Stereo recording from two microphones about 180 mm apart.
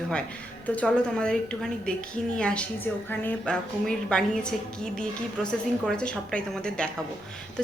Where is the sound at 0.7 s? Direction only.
5° left (ahead or behind).